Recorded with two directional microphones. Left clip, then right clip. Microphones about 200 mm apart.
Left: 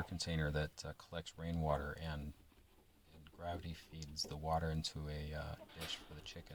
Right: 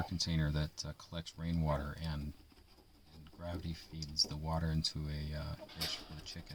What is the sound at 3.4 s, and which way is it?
Speech, centre (ahead or behind).